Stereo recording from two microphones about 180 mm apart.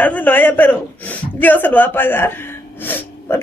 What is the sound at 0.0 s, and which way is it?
A man's voice, 10° left (ahead or behind).